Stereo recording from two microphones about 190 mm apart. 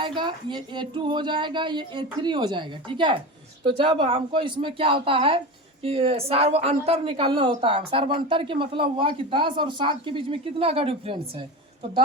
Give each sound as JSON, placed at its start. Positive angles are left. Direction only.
{"t": 0.0, "sound": "a woman's voice", "side_deg": -25}